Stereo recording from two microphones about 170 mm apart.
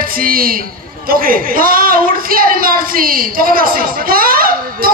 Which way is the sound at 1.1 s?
55° right (ahead or behind).